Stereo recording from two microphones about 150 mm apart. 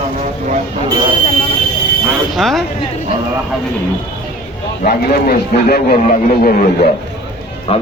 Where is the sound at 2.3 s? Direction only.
Centre (ahead or behind).